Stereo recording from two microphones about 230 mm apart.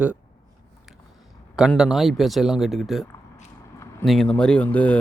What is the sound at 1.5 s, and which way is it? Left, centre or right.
Speech, centre.